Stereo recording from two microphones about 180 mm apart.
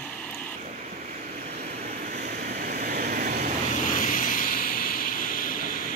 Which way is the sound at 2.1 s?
55° right (ahead or behind).